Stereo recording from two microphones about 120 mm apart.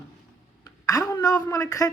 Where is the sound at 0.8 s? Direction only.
25° left (ahead or behind).